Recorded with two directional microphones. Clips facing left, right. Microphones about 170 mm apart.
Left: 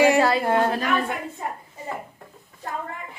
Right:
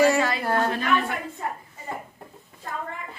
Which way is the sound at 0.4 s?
25° left (ahead or behind).